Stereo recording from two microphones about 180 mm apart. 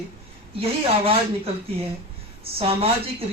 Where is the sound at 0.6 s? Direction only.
30° right (ahead or behind).